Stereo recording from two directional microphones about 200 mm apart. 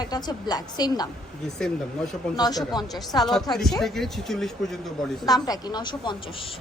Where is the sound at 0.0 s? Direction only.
20° left (ahead or behind).